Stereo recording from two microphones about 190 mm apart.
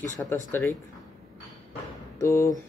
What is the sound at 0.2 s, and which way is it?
Speech, 10° left (ahead or behind).